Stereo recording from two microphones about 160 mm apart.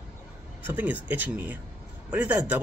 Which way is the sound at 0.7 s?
10° right (ahead or behind).